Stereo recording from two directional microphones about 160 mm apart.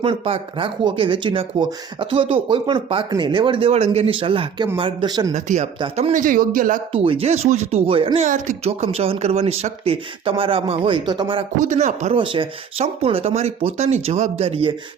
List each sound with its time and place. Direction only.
0.0 s speech: 35° right (ahead or behind)
5.3 s speech: 45° right (ahead or behind)
6.2 s a man's voice: 60° right (ahead or behind)
6.9 s speech: 35° right (ahead or behind)
11.7 s speech: 45° right (ahead or behind)
12.1 s speech: 30° right (ahead or behind)